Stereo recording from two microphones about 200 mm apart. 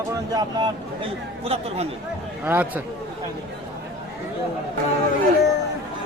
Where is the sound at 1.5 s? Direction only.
30° right (ahead or behind).